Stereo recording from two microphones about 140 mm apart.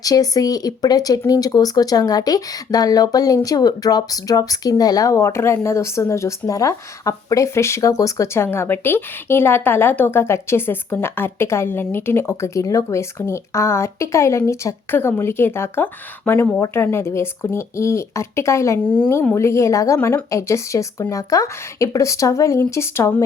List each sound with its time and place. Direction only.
0.0 s speech: 25° left (ahead or behind)